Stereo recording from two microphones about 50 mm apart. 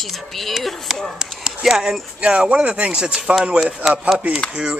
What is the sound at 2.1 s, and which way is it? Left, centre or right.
Speech, right.